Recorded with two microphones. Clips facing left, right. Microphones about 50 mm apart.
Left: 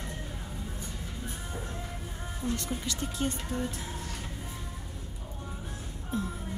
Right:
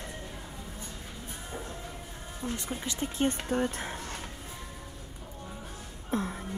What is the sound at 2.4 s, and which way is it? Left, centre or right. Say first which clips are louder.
Speech: left 2 dB; centre.